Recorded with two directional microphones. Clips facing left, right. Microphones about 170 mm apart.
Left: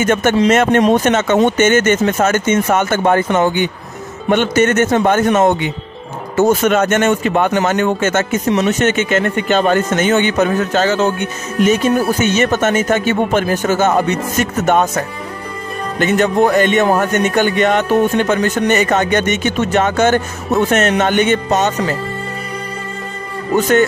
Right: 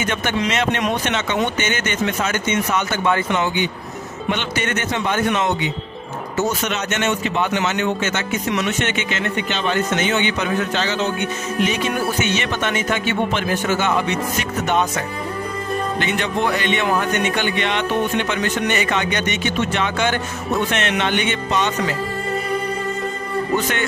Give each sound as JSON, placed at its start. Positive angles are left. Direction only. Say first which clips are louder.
{"t": 0.0, "sound": "speech", "louder": "left 9 dB", "side_deg": 45}
{"t": 8.5, "sound": "speech", "louder": "left 7 dB", "side_deg": 35}